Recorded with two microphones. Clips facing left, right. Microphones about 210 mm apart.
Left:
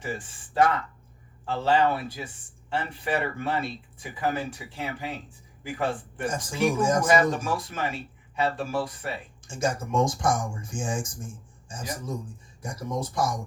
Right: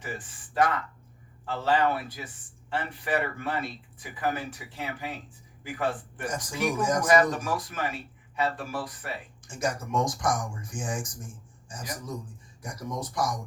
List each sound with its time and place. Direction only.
0.0 s speech: 25° left (ahead or behind)